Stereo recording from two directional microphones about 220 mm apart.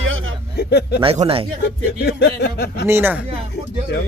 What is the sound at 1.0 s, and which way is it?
Speech, 25° right (ahead or behind).